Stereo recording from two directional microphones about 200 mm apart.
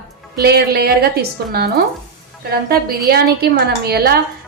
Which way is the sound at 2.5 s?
50° right (ahead or behind).